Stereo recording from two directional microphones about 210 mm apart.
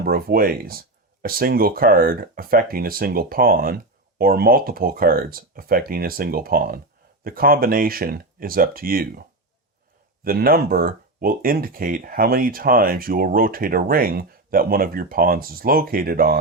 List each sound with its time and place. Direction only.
0.0 s speech: 45° right (ahead or behind)
10.2 s speech: 45° right (ahead or behind)